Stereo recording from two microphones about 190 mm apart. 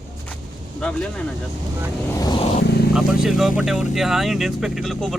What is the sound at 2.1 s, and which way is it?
Vehicle, 20° left (ahead or behind).